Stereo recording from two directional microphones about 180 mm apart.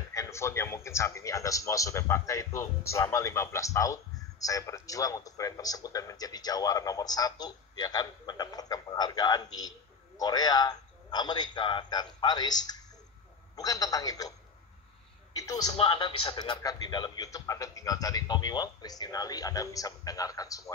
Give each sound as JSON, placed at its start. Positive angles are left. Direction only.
{"t": 0.1, "sound": "a man's voice", "side_deg": 15}
{"t": 15.3, "sound": "a man's voice", "side_deg": 20}
{"t": 15.7, "sound": "a man's voice", "side_deg": 30}